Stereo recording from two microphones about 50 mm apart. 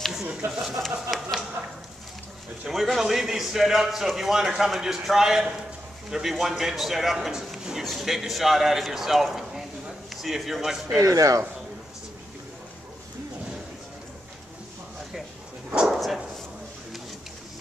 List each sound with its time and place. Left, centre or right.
0.5 s speech: centre
2.7 s a man's voice: centre
11.0 s speech: right
15.9 s bow-wow: centre